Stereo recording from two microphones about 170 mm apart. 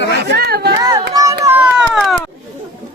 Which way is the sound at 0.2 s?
75° right (ahead or behind).